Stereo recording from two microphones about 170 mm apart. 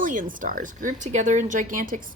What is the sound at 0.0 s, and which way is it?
A woman's voice, 50° right (ahead or behind).